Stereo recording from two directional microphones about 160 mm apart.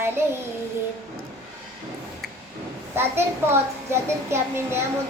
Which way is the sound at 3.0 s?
15° right (ahead or behind).